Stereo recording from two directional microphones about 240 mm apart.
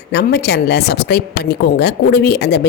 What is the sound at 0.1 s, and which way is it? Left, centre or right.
Speech, left.